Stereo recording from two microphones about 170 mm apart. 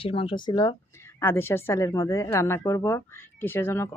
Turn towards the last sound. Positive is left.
turn(degrees=15)  # may be behind; listen again after turning